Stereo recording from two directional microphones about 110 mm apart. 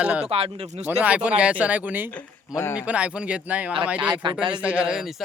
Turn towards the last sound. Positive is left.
turn(degrees=-5)  # may be behind; listen again after turning